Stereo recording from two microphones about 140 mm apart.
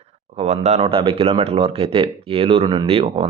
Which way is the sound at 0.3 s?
50° right (ahead or behind).